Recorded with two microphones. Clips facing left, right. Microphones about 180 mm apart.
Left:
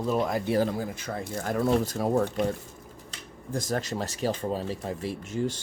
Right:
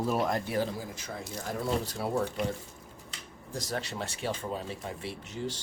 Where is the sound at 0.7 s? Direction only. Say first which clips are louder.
Left 7 dB; 55° left (ahead or behind).